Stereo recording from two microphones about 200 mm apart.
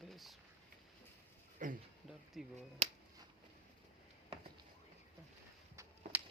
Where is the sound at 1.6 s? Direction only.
40° right (ahead or behind).